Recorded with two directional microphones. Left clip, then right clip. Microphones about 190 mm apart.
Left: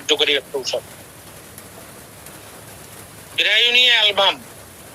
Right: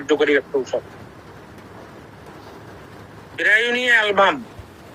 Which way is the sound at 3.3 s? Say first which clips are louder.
Left 2 dB; 15° left (ahead or behind).